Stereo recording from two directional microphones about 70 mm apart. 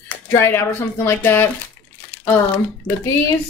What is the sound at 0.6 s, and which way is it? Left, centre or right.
Speech, left.